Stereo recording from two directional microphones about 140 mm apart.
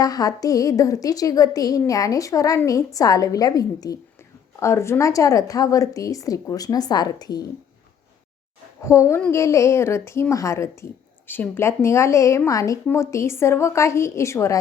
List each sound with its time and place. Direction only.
0.0 s a woman's voice: 25° left (ahead or behind)
8.8 s a woman's voice: 20° left (ahead or behind)